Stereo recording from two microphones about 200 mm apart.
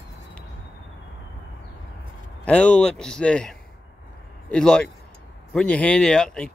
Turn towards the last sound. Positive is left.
turn(degrees=5)  # may be behind; listen again after turning